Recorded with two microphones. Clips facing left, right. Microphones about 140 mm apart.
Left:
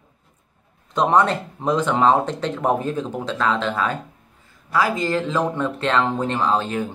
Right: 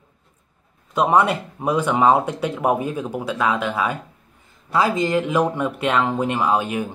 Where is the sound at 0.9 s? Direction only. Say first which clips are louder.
Even; 10° right (ahead or behind).